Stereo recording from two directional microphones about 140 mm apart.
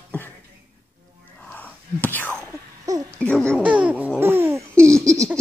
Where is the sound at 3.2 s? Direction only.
10° left (ahead or behind).